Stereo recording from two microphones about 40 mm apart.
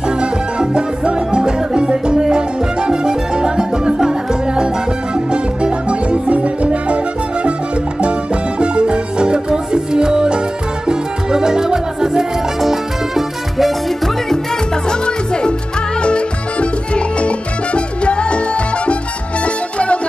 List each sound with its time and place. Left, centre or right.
0.2 s music: right
8.0 s music: right
10.9 s salsa music: centre
12.5 s salsa music: centre
14.9 s music: left
16.0 s salsa music: left
19.4 s music: left